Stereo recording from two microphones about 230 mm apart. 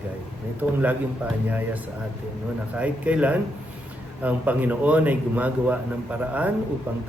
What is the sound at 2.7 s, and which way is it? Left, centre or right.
A man's voice, centre.